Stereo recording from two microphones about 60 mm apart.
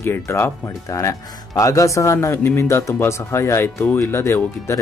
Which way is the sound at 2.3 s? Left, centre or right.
Left.